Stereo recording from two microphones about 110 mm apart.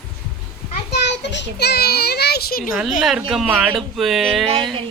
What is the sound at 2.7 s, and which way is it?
Speech, 5° right (ahead or behind).